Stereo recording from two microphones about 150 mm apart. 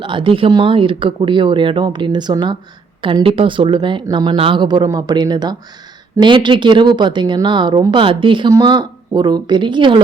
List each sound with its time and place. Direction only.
0.0 s a woman's voice: 35° right (ahead or behind)